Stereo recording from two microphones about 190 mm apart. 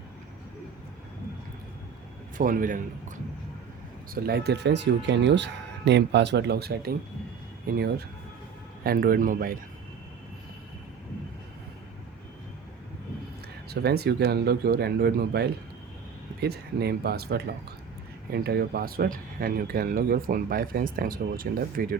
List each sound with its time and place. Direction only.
2.4 s speech: 45° right (ahead or behind)
4.1 s speech: 55° right (ahead or behind)
13.7 s speech: 55° right (ahead or behind)